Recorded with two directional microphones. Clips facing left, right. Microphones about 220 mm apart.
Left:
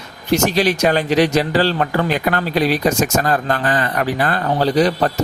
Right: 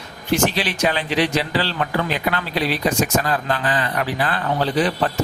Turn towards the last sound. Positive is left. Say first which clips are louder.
# left 4 dB
turn(degrees=40)  # may be behind; listen again after turning